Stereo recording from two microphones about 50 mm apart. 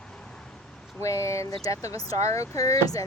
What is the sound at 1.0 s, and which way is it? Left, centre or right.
Speech, left.